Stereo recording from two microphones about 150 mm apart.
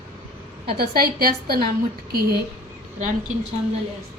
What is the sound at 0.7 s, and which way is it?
Speech, 85° right.